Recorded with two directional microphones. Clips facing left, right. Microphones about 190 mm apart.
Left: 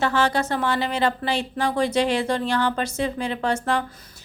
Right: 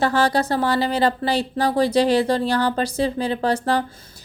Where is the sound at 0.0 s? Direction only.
35° right (ahead or behind).